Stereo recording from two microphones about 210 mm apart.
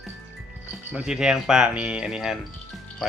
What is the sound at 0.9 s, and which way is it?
Speech, 5° right (ahead or behind).